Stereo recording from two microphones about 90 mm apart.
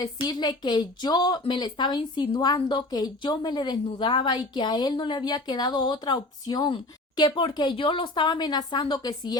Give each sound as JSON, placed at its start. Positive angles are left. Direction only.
{"t": 0.0, "sound": "a woman's voice", "side_deg": 55}